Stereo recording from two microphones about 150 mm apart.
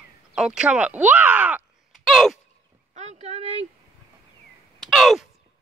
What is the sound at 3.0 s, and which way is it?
Speech, 50° right (ahead or behind).